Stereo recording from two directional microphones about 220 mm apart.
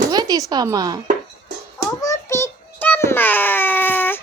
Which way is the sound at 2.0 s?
15° left (ahead or behind).